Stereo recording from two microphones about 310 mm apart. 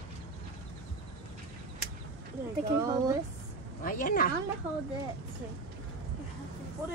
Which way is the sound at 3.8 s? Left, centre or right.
Left.